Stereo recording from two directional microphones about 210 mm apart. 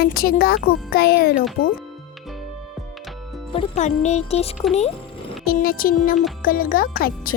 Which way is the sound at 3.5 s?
30° left (ahead or behind).